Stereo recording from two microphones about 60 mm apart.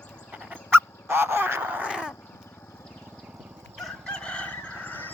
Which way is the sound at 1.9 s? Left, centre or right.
Centre.